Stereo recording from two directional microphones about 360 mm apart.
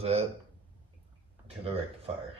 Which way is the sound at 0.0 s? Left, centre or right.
Centre.